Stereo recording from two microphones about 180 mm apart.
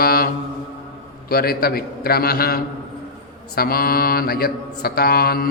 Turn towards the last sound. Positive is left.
turn(degrees=55)  # may be behind; listen again after turning